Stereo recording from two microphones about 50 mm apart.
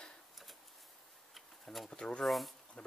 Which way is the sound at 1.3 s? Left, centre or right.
Centre.